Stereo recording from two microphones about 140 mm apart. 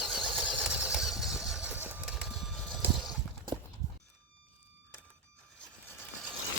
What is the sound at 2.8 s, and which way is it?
Horse, 5° right (ahead or behind).